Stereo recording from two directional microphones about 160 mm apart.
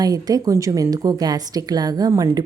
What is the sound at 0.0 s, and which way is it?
A woman's voice, 25° right (ahead or behind).